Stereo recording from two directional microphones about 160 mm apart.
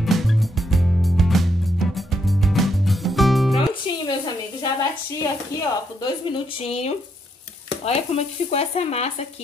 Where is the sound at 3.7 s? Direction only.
30° left (ahead or behind).